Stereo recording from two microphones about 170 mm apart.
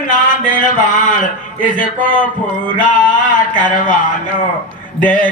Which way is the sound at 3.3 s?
50° left (ahead or behind).